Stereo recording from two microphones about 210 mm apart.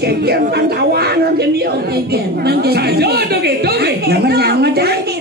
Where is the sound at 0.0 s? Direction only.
50° right (ahead or behind).